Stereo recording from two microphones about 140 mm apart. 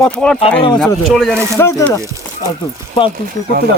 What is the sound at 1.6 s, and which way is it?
Speech, 20° left (ahead or behind).